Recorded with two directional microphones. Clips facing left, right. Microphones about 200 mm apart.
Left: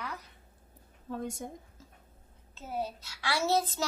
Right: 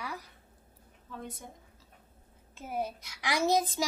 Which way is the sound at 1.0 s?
45° left (ahead or behind).